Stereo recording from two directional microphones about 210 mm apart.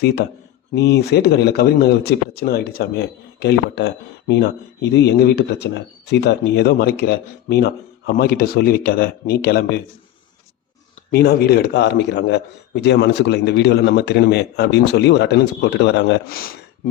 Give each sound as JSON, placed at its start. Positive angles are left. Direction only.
{"t": 0.7, "sound": "speech", "side_deg": 50}
{"t": 11.1, "sound": "speech", "side_deg": 50}